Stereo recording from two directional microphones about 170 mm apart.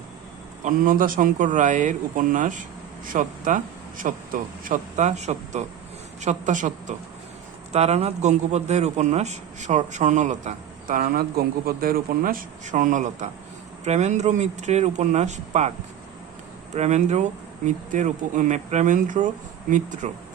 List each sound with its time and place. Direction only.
0.6 s a man's voice: 55° right (ahead or behind)
16.7 s a man's voice: 40° right (ahead or behind)